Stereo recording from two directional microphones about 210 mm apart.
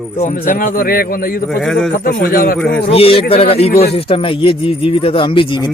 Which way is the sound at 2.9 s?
25° left (ahead or behind).